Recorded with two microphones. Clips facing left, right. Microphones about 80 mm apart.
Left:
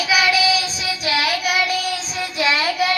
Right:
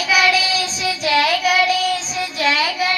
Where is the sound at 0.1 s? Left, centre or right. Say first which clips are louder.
Right 1 dB; centre.